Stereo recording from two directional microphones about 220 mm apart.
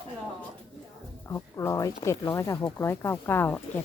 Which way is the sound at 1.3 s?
15° left (ahead or behind).